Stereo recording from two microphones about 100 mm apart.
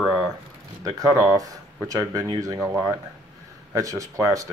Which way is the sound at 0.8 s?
35° right (ahead or behind).